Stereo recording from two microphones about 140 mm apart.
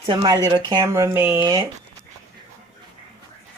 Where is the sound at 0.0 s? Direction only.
35° right (ahead or behind); by 1.5 s 15° right (ahead or behind).